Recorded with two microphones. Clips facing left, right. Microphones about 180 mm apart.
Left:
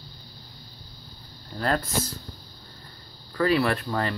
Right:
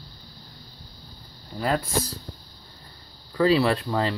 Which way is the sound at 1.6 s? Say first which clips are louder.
Right 1 dB; 5° right (ahead or behind).